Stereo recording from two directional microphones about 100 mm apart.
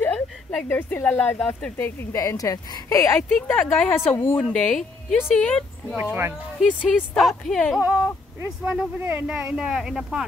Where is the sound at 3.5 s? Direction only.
15° left (ahead or behind).